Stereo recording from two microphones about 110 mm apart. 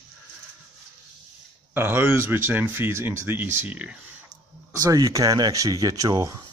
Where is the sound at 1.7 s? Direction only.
20° right (ahead or behind).